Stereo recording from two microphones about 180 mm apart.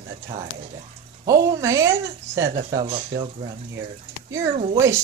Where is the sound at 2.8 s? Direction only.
30° right (ahead or behind).